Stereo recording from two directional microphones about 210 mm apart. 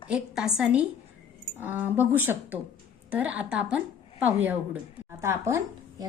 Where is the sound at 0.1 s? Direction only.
5° right (ahead or behind).